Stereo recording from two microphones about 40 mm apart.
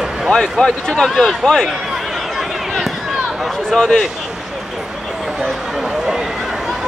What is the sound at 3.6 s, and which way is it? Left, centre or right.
Speech, centre.